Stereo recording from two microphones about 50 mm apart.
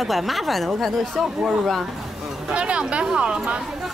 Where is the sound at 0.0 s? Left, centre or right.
Centre.